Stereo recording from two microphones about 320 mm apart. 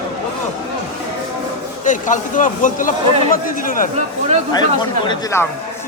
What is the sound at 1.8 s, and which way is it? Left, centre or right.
Speech, left.